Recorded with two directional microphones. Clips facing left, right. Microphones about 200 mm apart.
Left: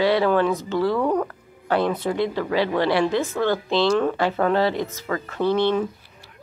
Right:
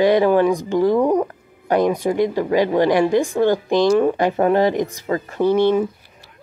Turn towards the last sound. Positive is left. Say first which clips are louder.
# right 4 dB
turn(degrees=-10)  # may be behind; listen again after turning